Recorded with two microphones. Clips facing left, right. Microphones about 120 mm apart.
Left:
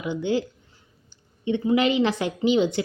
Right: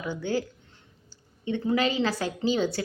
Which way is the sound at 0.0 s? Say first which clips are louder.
Left 4 dB; 20° left (ahead or behind).